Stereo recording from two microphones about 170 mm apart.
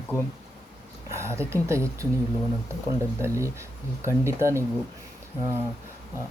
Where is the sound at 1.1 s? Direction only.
15° right (ahead or behind).